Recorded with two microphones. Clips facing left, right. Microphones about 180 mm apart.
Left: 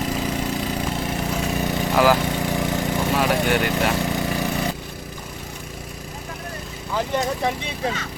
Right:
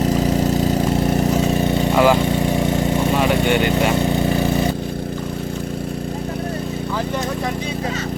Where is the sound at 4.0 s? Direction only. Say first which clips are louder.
Right 6 dB; 25° right (ahead or behind).